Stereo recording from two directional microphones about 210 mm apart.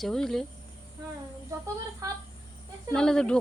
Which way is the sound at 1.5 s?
15° right (ahead or behind).